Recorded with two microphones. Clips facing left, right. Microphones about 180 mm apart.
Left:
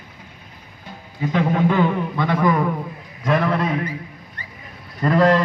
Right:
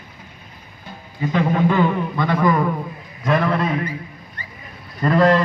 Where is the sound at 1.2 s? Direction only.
10° left (ahead or behind).